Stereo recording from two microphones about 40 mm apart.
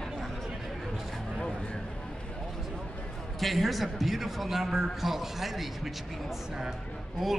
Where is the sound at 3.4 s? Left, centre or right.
Centre.